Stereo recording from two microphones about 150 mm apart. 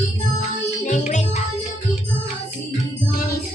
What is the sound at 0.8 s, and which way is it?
Music, 55° left (ahead or behind).